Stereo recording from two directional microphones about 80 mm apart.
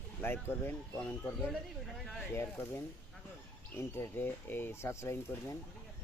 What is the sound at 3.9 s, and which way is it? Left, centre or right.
Speech, left.